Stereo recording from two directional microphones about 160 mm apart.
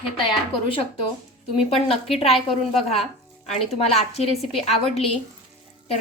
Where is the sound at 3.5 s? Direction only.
40° left (ahead or behind).